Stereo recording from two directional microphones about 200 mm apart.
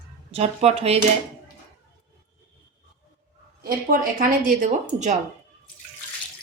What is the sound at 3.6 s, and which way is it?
Speech, 45° right (ahead or behind).